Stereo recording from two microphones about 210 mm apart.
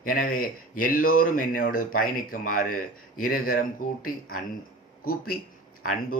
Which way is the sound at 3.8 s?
90° left.